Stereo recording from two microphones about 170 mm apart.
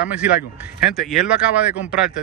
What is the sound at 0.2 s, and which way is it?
Speech, 10° right (ahead or behind).